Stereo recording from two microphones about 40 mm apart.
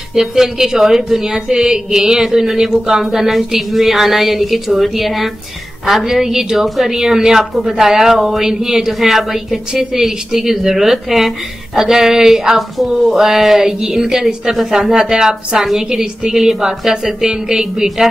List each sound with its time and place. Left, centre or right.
0.1 s a woman's voice: centre